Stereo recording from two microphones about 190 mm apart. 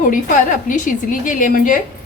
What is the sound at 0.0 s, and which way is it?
A woman's voice, 45° left (ahead or behind).